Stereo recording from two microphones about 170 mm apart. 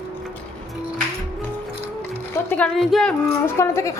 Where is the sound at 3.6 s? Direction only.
15° left (ahead or behind).